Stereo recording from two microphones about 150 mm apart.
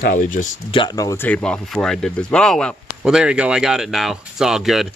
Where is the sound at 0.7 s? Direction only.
30° left (ahead or behind).